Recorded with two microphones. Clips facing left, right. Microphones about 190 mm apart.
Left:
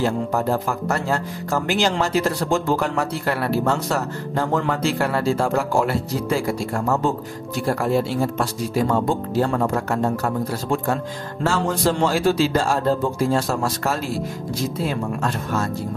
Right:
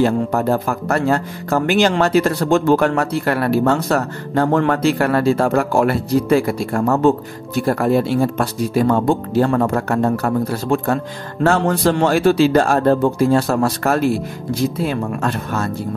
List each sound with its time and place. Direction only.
0.0 s speech: 60° right (ahead or behind)